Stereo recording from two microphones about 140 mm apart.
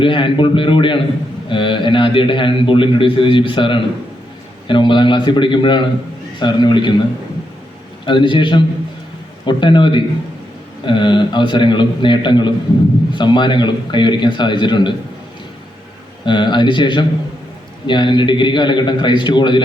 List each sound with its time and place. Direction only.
0.0 s a man's voice: 40° left (ahead or behind)
8.0 s a man's voice: 35° left (ahead or behind)
16.2 s a man's voice: 35° left (ahead or behind)